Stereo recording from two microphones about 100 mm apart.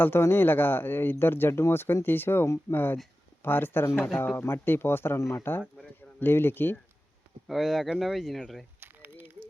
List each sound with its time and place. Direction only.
0.0 s speech: 25° left (ahead or behind)
7.4 s speech: centre (ahead or behind)
8.8 s a sound: 20° right (ahead or behind)